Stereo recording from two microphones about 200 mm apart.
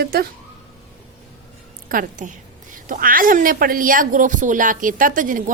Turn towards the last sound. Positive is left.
turn(degrees=-40)  # may be behind; listen again after turning